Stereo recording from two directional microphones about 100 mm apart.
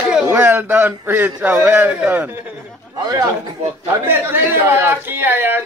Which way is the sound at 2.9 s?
45° right (ahead or behind).